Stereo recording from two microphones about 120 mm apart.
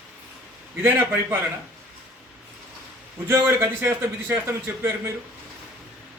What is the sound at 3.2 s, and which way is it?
A man's voice, 20° right (ahead or behind).